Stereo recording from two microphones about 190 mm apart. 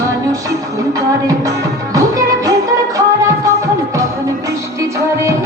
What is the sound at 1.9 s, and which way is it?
Music, 15° right (ahead or behind).